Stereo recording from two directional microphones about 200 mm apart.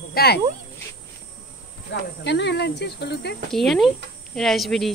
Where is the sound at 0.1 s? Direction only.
50° left (ahead or behind).